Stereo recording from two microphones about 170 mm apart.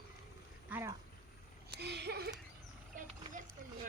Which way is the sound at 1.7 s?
80° right.